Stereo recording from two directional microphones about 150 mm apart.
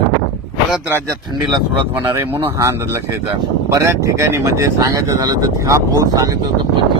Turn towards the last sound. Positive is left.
turn(degrees=-20)  # may be behind; listen again after turning